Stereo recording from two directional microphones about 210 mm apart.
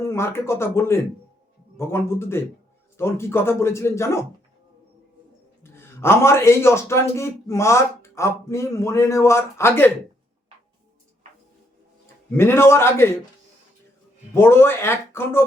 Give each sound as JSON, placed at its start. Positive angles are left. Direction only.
{"t": 0.0, "sound": "a man's voice", "side_deg": 10}
{"t": 5.6, "sound": "a man's voice", "side_deg": 10}
{"t": 12.3, "sound": "a man's voice", "side_deg": 10}
{"t": 14.3, "sound": "a man's voice", "side_deg": 10}